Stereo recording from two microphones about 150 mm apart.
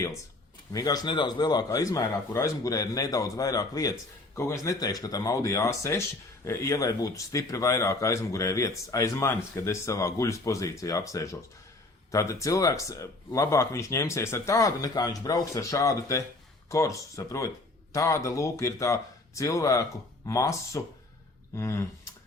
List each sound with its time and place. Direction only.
0.7 s speech: 25° left (ahead or behind)